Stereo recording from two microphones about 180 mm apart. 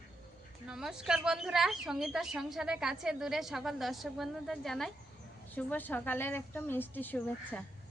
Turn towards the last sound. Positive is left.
turn(degrees=10)  # may be behind; listen again after turning